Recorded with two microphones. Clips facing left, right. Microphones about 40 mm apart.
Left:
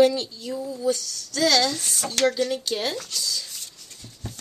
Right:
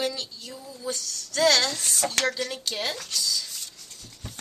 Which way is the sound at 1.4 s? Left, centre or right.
Centre.